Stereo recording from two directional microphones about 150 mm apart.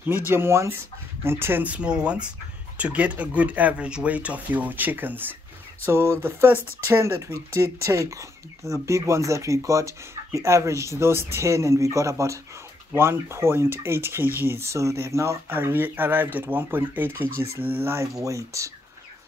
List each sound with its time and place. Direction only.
0.3 s speech: 15° right (ahead or behind)